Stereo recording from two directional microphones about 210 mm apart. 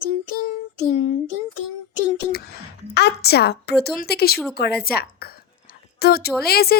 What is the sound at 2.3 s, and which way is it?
Speech, 50° left (ahead or behind).